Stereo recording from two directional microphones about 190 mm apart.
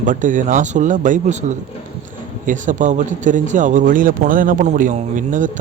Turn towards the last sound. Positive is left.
turn(degrees=-45)  # may be behind; listen again after turning